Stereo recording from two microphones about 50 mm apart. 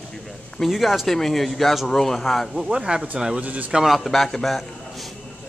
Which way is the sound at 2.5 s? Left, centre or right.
Centre.